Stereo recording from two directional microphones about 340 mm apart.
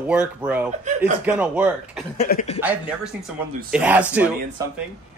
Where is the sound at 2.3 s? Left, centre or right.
Left.